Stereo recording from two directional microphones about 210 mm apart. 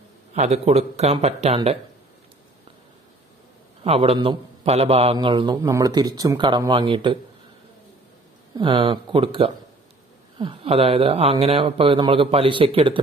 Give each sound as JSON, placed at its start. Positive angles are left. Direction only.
{"t": 0.3, "sound": "speech", "side_deg": -30}
{"t": 3.8, "sound": "a man's voice", "side_deg": -30}
{"t": 8.5, "sound": "a man's voice", "side_deg": -25}